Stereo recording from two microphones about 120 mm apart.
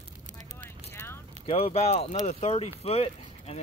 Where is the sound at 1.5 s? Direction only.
55° left (ahead or behind).